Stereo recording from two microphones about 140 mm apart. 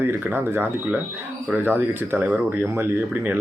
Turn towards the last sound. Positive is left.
turn(degrees=-15)  # may be behind; listen again after turning